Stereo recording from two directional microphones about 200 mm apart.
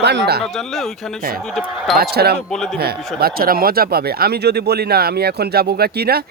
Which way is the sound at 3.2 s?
50° right (ahead or behind).